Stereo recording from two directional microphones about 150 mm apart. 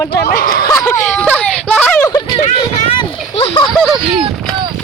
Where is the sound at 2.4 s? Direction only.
40° left (ahead or behind).